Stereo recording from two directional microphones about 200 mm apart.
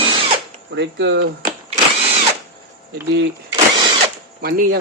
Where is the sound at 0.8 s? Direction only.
60° right (ahead or behind).